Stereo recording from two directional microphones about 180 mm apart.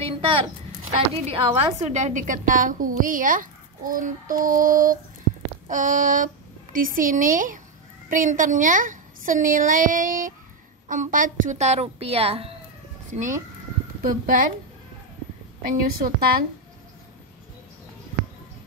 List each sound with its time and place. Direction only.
1.2 s a woman's voice: 35° right (ahead or behind)
13.1 s a woman's voice: 45° right (ahead or behind)
15.6 s a woman's voice: 50° right (ahead or behind)